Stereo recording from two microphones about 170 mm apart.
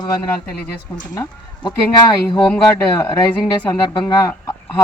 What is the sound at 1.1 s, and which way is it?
Speech, 20° left (ahead or behind).